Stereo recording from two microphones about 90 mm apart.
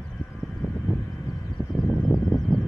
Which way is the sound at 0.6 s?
30° left (ahead or behind).